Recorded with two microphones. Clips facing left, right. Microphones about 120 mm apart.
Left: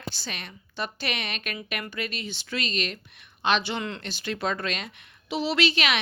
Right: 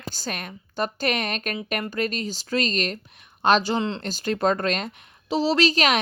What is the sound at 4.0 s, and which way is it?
A woman's voice, 40° right (ahead or behind).